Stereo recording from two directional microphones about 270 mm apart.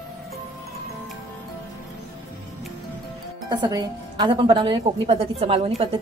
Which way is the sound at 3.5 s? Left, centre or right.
Centre.